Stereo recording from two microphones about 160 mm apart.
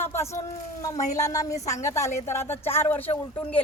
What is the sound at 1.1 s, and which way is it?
A woman's voice, 20° left (ahead or behind).